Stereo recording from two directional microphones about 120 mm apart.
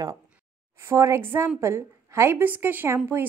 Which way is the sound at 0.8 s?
25° right (ahead or behind).